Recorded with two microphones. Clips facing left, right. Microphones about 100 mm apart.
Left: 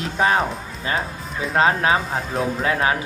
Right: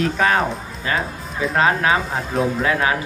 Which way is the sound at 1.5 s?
30° left (ahead or behind).